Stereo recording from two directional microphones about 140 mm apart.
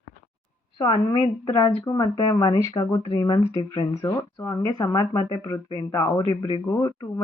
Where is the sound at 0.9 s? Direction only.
50° left (ahead or behind).